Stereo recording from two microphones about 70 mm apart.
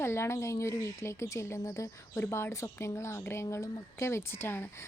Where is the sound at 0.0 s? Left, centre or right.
Left.